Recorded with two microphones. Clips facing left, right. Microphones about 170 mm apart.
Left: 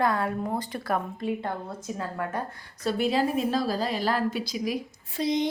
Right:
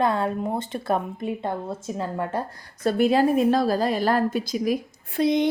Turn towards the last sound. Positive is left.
turn(degrees=-60)  # may be behind; listen again after turning